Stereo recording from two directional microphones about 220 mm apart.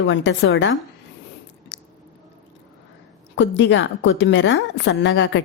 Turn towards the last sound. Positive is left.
turn(degrees=60)  # may be behind; listen again after turning